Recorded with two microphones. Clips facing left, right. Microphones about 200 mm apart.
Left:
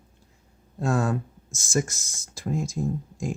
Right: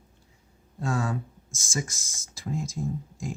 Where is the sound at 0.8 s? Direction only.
55° left (ahead or behind).